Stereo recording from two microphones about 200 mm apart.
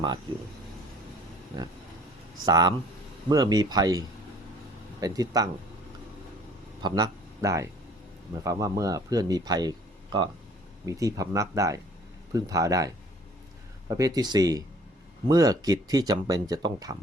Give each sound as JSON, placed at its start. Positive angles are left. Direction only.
{"t": 2.5, "sound": "a man's voice", "side_deg": -20}
{"t": 6.8, "sound": "a man's voice", "side_deg": -20}